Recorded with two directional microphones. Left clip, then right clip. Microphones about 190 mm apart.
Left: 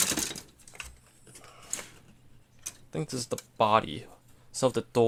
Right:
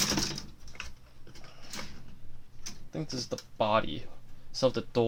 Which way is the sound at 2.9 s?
45° left (ahead or behind).